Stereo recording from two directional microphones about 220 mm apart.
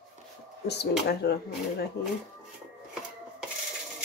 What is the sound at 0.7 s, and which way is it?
Speech, 50° left (ahead or behind).